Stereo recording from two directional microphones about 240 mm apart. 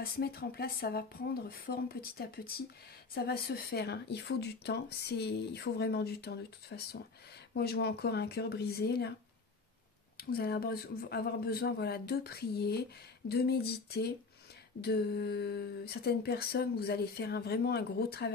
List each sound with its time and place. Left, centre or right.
0.0 s speech: left
10.1 s speech: left